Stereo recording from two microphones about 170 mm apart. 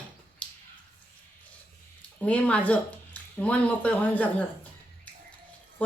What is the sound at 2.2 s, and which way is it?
Speech, 10° left (ahead or behind).